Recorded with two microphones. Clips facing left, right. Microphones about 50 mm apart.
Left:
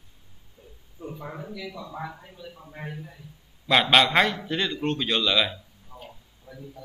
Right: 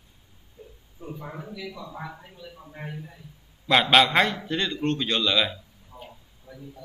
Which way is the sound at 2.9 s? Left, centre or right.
Centre.